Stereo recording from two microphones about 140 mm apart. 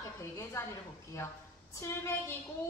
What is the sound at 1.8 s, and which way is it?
Speech, 20° left (ahead or behind).